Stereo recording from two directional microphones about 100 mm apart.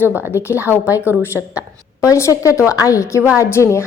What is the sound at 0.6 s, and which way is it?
Speech, 15° right (ahead or behind).